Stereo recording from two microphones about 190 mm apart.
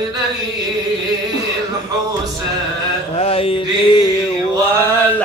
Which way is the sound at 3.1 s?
30° left (ahead or behind).